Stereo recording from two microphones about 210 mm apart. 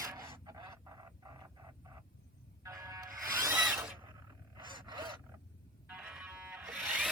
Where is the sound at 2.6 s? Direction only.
15° right (ahead or behind).